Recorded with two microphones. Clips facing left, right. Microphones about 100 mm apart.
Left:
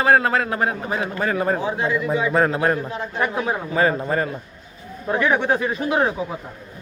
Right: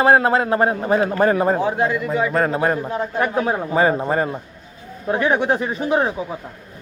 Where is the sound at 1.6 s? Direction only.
50° right (ahead or behind).